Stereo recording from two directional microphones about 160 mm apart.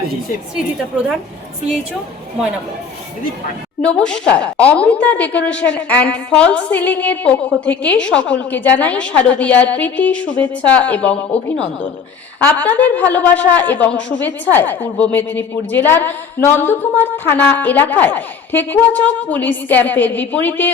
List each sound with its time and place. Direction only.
3.9 s a woman's voice: 5° left (ahead or behind)